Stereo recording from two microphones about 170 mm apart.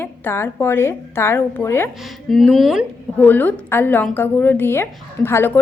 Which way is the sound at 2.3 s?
Centre (ahead or behind).